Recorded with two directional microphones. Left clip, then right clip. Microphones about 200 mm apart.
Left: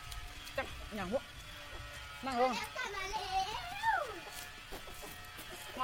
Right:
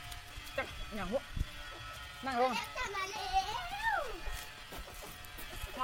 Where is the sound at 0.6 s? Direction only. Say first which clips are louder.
Right 1 dB; 10° left (ahead or behind).